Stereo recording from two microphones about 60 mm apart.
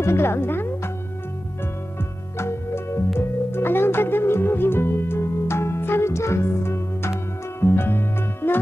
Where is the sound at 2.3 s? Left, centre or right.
Left.